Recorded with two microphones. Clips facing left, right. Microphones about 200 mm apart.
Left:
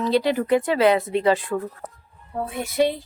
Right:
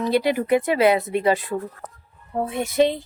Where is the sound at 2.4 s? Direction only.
20° right (ahead or behind).